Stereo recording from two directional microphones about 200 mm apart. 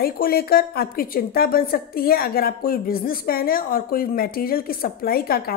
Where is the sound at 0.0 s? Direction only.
50° left (ahead or behind).